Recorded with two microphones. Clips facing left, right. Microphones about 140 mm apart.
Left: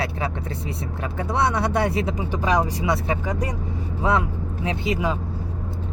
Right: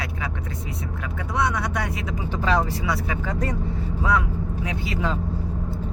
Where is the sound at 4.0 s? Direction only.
25° left (ahead or behind).